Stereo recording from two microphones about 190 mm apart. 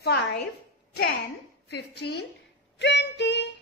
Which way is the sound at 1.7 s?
60° left (ahead or behind).